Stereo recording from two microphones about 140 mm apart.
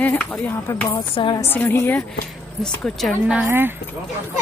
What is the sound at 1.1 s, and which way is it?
Speech, 35° left (ahead or behind).